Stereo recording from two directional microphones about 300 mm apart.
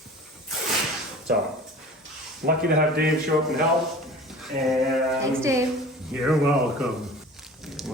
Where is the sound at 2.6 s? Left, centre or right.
Right.